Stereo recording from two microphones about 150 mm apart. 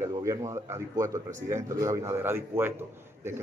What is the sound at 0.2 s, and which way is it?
Speech, 20° right (ahead or behind).